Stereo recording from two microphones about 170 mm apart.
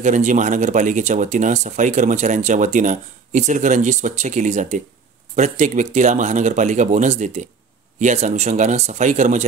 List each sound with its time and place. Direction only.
0.0 s speech: 45° right (ahead or behind)